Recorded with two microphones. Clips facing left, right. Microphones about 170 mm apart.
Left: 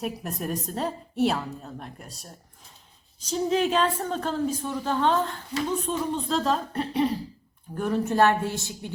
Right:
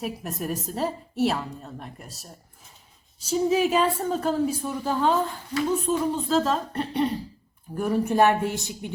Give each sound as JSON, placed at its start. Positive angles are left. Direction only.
{"t": 0.0, "sound": "a woman's voice", "side_deg": 0}
{"t": 7.8, "sound": "speech", "side_deg": -10}